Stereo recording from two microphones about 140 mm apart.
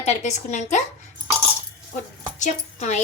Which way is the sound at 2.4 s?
60° left (ahead or behind).